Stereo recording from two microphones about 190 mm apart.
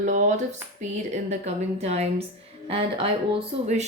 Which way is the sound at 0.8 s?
40° right (ahead or behind).